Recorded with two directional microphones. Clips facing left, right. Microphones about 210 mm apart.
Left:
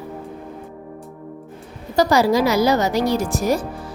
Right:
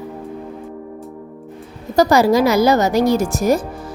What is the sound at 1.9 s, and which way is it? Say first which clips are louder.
A woman's voice: right 3 dB; 50° right (ahead or behind).